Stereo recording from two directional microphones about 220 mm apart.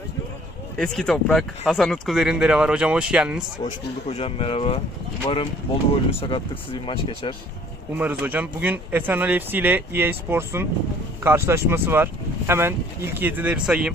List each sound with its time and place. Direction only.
0.8 s speech: centre (ahead or behind)
3.6 s speech: 30° left (ahead or behind)
5.9 s speech: 25° left (ahead or behind)
7.9 s speech: 10° right (ahead or behind)